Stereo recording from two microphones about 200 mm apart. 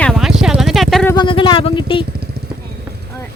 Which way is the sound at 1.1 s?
25° left (ahead or behind).